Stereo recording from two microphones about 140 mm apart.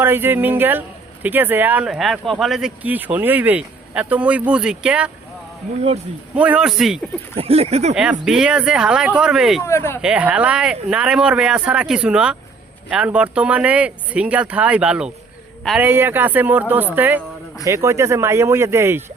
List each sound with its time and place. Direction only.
0.0 s speech: 15° right (ahead or behind)
6.3 s speech: 10° right (ahead or behind)
7.3 s a sound: 45° right (ahead or behind)
8.2 s speech: 5° right (ahead or behind)
9.6 s speech: 20° left (ahead or behind)
10.0 s speech: 5° right (ahead or behind)